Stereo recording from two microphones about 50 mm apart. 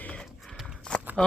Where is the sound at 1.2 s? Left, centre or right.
Centre.